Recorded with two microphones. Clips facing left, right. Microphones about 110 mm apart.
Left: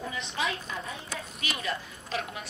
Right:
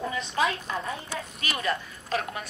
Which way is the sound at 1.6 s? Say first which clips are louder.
Right 8 dB; 50° right (ahead or behind).